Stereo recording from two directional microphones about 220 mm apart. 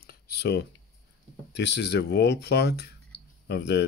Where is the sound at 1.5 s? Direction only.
50° left (ahead or behind).